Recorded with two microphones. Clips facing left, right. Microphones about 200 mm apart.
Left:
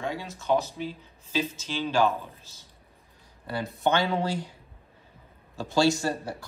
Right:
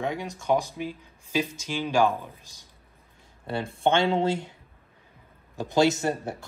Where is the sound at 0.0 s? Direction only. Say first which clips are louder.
Right 3 dB; 15° right (ahead or behind).